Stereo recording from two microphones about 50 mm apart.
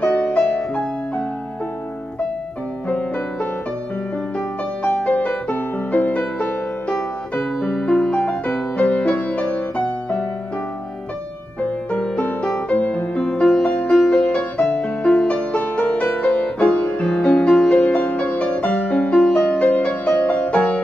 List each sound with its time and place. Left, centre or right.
0.0 s music: centre
2.9 s music: left
5.1 s music: left
7.9 s music: centre
8.5 s music: left
11.6 s music: left
13.4 s music: centre
19.6 s music: left
20.5 s music: left